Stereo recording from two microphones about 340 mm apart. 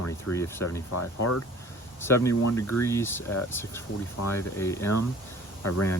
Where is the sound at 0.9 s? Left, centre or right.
Left.